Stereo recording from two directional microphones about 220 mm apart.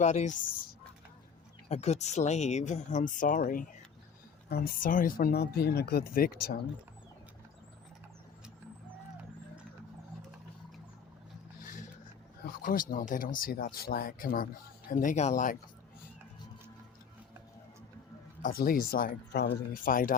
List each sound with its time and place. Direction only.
0.0 s speech: 30° left (ahead or behind)
1.7 s speech: 30° left (ahead or behind)
11.6 s a sound: 35° left (ahead or behind)
12.9 s speech: 40° left (ahead or behind)
18.4 s speech: 40° left (ahead or behind)